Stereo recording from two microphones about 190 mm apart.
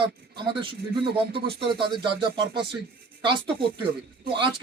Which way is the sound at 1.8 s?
60° right (ahead or behind).